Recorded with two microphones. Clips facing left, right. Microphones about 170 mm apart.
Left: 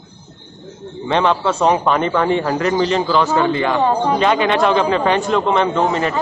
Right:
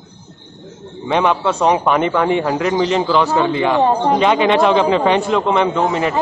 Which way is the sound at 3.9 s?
15° right (ahead or behind).